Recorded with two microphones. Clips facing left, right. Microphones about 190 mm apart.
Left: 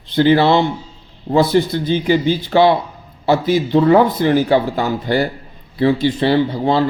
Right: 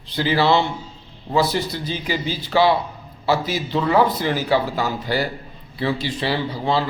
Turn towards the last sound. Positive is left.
turn(degrees=55)  # may be behind; listen again after turning